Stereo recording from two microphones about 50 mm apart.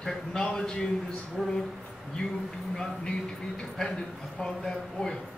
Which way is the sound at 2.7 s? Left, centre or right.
Centre.